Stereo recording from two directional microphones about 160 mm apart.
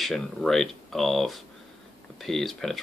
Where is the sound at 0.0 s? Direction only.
Centre (ahead or behind).